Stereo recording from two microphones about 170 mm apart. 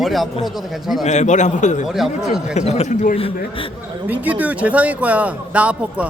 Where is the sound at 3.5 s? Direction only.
30° left (ahead or behind).